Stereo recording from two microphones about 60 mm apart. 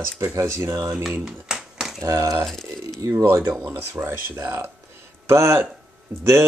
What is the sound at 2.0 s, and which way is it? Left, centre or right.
Speech, right.